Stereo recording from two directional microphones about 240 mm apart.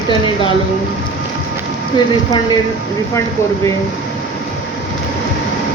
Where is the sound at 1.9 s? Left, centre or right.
Left.